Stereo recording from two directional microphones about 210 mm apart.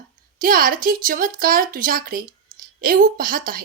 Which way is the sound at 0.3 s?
40° right (ahead or behind).